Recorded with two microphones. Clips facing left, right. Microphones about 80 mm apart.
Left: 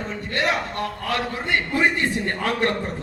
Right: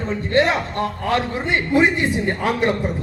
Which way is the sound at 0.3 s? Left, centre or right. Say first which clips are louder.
Right 6 dB; right.